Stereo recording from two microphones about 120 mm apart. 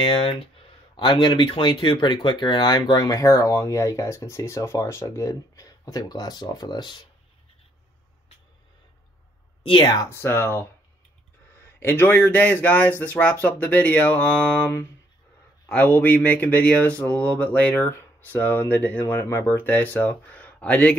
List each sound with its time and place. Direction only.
0.0 s speech: 40° left (ahead or behind)
9.7 s speech: 40° left (ahead or behind)
9.9 s speech: 20° left (ahead or behind)
11.8 s speech: 20° left (ahead or behind)
15.7 s speech: 15° left (ahead or behind)